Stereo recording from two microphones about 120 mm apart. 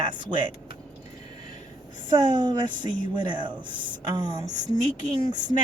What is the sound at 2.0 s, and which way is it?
Speech, 40° right (ahead or behind).